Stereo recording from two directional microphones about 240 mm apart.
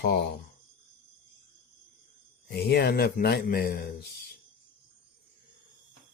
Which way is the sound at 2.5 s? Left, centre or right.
Left.